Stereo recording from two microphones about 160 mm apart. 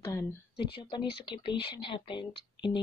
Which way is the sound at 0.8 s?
30° left (ahead or behind).